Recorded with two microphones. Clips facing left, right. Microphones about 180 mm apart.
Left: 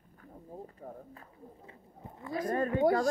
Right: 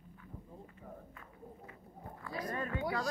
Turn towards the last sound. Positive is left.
turn(degrees=45)  # may be behind; listen again after turning